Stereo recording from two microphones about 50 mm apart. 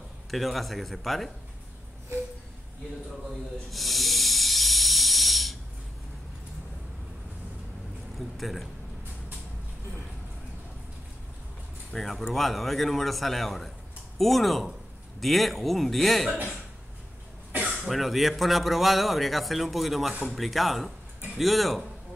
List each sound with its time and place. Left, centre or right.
0.3 s speech: centre
3.7 s hiss: centre
8.4 s a man's voice: centre
11.9 s speech: centre
17.5 s cough: right
17.7 s speech: centre